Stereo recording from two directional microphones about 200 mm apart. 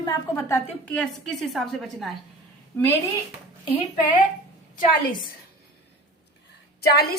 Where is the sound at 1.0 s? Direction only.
Centre (ahead or behind).